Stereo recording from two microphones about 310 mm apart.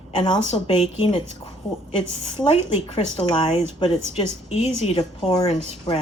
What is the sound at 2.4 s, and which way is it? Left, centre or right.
A woman's voice, centre.